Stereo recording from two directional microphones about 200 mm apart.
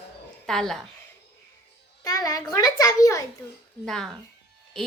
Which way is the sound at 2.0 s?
20° left (ahead or behind).